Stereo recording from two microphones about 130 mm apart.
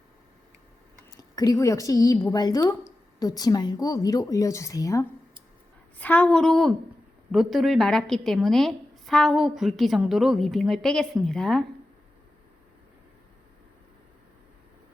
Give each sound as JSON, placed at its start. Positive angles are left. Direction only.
{"t": 1.1, "sound": "a woman's voice", "side_deg": 30}
{"t": 6.0, "sound": "a woman's voice", "side_deg": 10}